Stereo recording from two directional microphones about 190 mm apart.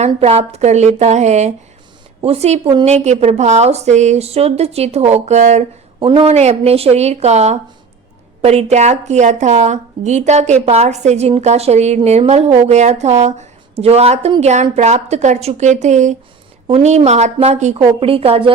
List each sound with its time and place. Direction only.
0.0 s a woman's voice: 35° right (ahead or behind)